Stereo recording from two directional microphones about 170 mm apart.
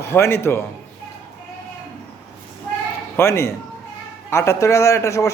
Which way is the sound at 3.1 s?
15° left (ahead or behind).